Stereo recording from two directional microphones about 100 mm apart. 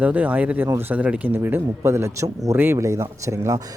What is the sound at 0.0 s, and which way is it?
Speech, 15° right (ahead or behind).